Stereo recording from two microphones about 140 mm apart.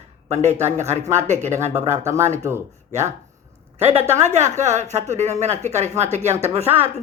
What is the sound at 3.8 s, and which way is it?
Speech, 45° right (ahead or behind).